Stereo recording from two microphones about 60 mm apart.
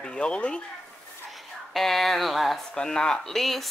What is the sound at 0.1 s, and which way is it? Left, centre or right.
Speech, centre.